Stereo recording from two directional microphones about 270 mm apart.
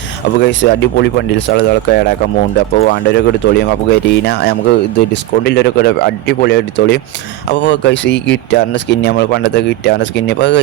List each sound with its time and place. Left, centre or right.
0.3 s speech: left